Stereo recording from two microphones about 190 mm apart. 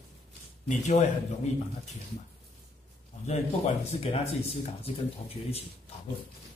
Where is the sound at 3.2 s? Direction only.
35° left (ahead or behind).